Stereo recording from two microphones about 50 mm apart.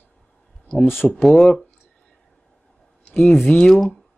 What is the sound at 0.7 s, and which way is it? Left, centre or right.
Speech, centre.